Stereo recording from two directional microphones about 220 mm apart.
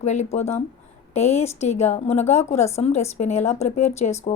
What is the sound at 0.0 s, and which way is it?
A woman's voice, 30° left (ahead or behind).